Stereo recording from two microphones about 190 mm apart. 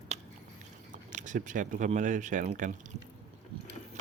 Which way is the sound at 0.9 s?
40° right (ahead or behind).